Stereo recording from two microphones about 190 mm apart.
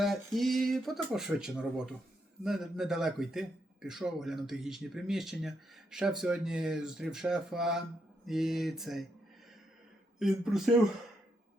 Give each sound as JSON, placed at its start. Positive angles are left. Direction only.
{"t": 0.0, "sound": "a man's voice", "side_deg": 0}
{"t": 10.2, "sound": "a man's voice", "side_deg": 0}